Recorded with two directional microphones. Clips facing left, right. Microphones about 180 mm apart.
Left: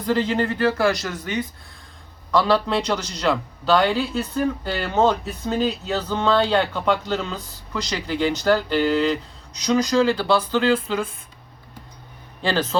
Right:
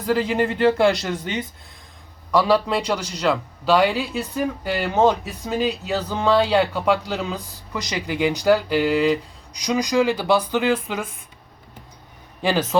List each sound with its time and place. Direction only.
0.0 s a man's voice: 5° right (ahead or behind)
0.6 s speech: 25° right (ahead or behind)
2.3 s a man's voice: 10° right (ahead or behind)
12.4 s a man's voice: 15° right (ahead or behind)